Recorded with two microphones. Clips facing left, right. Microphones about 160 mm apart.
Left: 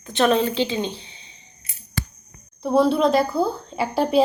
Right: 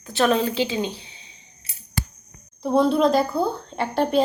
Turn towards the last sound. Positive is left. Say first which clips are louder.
# left 2 dB
turn(degrees=5)  # may be behind; listen again after turning